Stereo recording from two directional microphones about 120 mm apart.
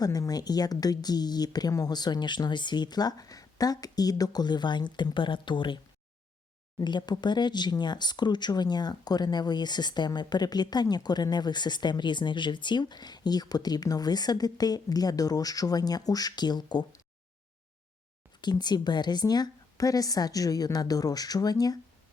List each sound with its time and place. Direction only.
0.0 s speech: 30° left (ahead or behind)
18.3 s speech: 35° left (ahead or behind)